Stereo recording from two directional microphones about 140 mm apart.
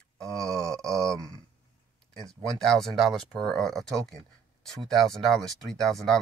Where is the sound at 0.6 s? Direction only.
20° right (ahead or behind).